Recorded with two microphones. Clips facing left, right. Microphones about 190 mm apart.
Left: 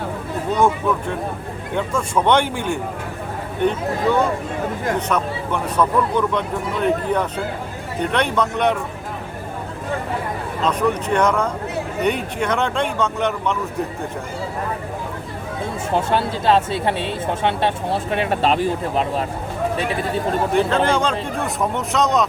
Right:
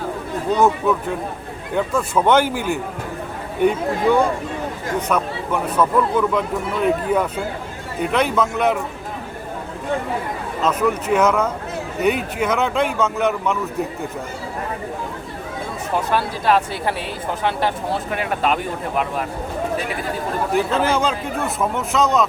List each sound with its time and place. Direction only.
0.5 s speech: 5° right (ahead or behind)
4.9 s speech: 10° right (ahead or behind)
10.6 s speech: 5° right (ahead or behind)
16.0 s speech: 25° left (ahead or behind)
20.5 s speech: 5° right (ahead or behind)